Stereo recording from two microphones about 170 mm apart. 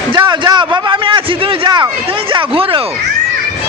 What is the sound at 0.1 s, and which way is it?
A man's voice, 25° right (ahead or behind).